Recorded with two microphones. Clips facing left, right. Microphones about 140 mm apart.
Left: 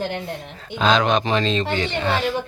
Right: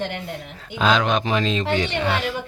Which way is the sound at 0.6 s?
5° right (ahead or behind).